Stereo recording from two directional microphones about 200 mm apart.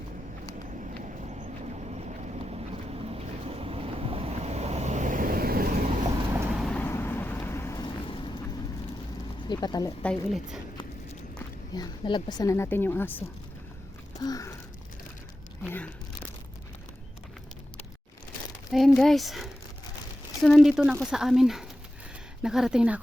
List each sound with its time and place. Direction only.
1.3 s vehicle: 35° right (ahead or behind)
6.3 s vehicle: 5° right (ahead or behind); by 8.2 s 25° left (ahead or behind)
9.5 s speech: 20° left (ahead or behind)
10.0 s speech: centre (ahead or behind)
11.7 s speech: 20° left (ahead or behind)
18.7 s speech: centre (ahead or behind)